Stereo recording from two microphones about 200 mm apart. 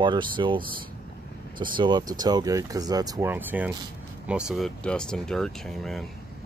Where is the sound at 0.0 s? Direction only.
25° right (ahead or behind).